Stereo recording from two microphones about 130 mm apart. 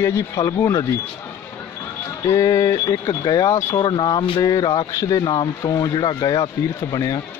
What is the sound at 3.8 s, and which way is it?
Speech, 35° left (ahead or behind).